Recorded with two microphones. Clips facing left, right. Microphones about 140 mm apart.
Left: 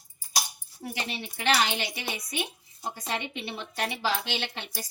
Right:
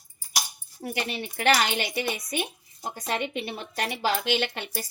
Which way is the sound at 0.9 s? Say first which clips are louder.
Right 5 dB; 55° right (ahead or behind).